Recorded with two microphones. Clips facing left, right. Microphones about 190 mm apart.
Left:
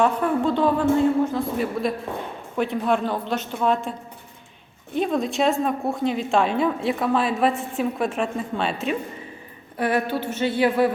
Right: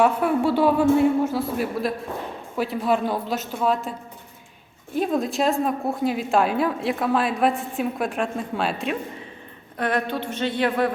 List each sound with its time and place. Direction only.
0.0 s a man's voice: 10° right (ahead or behind)
4.9 s a woman's voice: centre (ahead or behind)